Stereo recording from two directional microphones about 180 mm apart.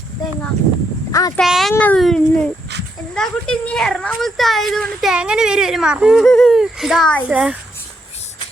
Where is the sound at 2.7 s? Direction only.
70° right (ahead or behind).